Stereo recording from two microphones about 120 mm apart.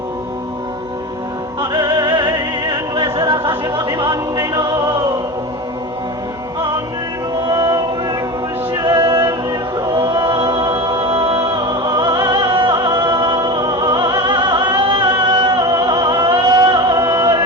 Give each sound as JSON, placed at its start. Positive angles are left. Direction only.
{"t": 1.7, "sound": "music", "side_deg": -35}
{"t": 7.3, "sound": "music", "side_deg": -35}